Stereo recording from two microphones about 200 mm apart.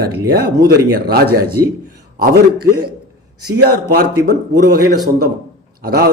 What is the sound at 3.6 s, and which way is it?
A man's voice, 50° right (ahead or behind).